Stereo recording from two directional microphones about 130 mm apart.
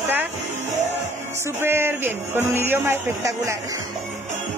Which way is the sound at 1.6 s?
15° right (ahead or behind).